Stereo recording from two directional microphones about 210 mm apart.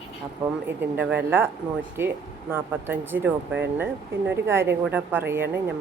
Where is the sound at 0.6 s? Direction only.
10° right (ahead or behind).